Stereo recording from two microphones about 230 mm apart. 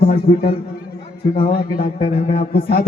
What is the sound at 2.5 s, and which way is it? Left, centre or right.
Speech, left.